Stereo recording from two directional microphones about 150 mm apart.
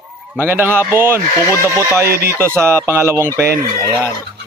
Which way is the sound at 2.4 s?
15° right (ahead or behind).